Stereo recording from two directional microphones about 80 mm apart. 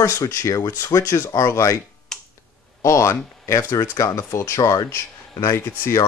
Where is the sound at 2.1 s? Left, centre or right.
Centre.